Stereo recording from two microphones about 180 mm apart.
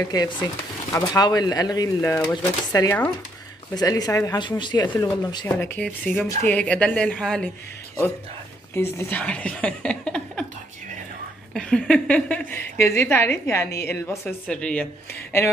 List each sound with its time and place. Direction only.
0.1 s speech: 20° left (ahead or behind)
5.6 s a woman's voice: 10° left (ahead or behind)
8.7 s a woman's voice: 15° left (ahead or behind)
11.5 s a woman's voice: 5° left (ahead or behind)